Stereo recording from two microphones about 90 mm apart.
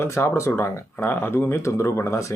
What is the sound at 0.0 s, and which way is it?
Speech, 30° left (ahead or behind).